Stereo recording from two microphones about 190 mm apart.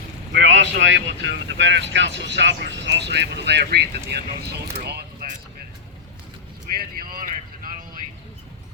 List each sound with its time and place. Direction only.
0.3 s speech: 70° right (ahead or behind)
4.8 s a sound: 55° right (ahead or behind)
6.7 s vehicle: 50° right (ahead or behind)